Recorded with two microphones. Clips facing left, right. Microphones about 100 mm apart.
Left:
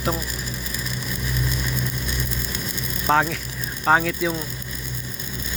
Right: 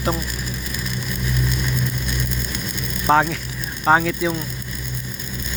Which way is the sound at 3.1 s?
15° right (ahead or behind).